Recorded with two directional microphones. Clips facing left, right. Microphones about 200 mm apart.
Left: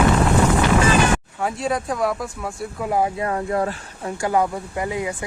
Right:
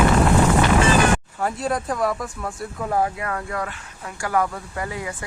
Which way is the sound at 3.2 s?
25° left (ahead or behind).